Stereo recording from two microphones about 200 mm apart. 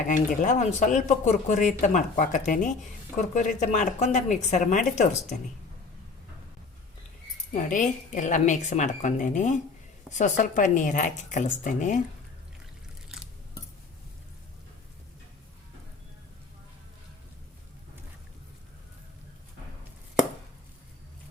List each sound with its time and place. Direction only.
0.4 s speech: 35° left (ahead or behind)
7.5 s speech: 40° left (ahead or behind)